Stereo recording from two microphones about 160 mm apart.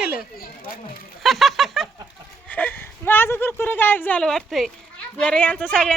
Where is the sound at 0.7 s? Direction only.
65° left (ahead or behind).